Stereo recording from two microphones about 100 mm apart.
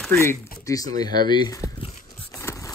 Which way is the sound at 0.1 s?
30° left (ahead or behind).